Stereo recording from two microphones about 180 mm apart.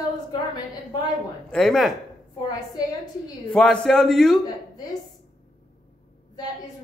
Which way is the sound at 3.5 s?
5° left (ahead or behind).